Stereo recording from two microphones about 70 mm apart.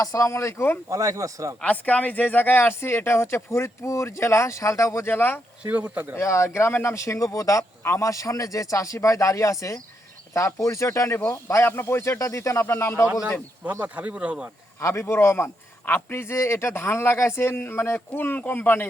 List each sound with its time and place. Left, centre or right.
0.0 s speech: left
0.9 s speech: right
1.6 s speech: left
5.0 s speech: left
5.6 s speech: right
6.1 s speech: left
12.2 s speech: left
13.7 s speech: right
14.8 s speech: left